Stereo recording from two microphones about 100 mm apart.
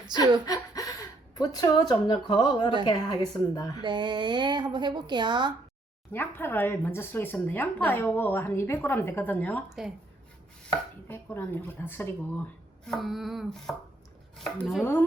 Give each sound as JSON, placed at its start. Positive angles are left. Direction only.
{"t": 0.4, "sound": "a woman's voice", "side_deg": 35}
{"t": 3.8, "sound": "a woman's voice", "side_deg": -45}
{"t": 6.1, "sound": "a woman's voice", "side_deg": 20}
{"t": 11.1, "sound": "a woman's voice", "side_deg": 25}
{"t": 12.8, "sound": "chopping", "side_deg": 0}